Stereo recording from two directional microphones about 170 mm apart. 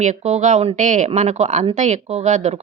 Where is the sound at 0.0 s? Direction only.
45° right (ahead or behind).